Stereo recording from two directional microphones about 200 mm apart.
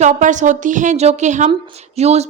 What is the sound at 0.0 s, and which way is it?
A woman's voice, 40° right (ahead or behind).